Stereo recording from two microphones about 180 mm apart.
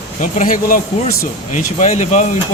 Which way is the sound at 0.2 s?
50° left (ahead or behind).